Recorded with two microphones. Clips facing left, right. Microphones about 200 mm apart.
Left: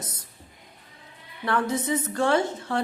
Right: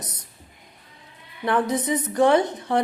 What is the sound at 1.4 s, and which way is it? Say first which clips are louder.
A woman's voice: right 3 dB; 20° right (ahead or behind).